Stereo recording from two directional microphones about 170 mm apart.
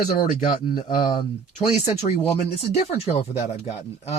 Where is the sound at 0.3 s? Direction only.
50° left (ahead or behind).